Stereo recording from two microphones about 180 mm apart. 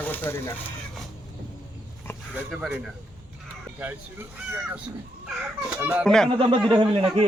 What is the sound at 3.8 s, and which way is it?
Speech, 10° right (ahead or behind).